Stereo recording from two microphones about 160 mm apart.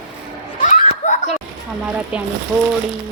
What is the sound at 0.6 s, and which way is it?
Snicker, 55° left (ahead or behind).